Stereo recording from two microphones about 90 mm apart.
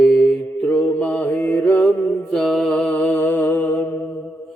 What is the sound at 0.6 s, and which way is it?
Mantra, 15° left (ahead or behind).